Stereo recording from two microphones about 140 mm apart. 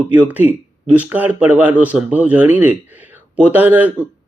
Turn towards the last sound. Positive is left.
turn(degrees=-10)  # may be behind; listen again after turning